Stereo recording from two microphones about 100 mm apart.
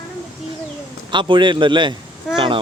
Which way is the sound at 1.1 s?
55° right (ahead or behind).